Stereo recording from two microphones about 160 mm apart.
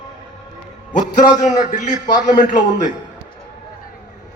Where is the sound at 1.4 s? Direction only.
50° left (ahead or behind).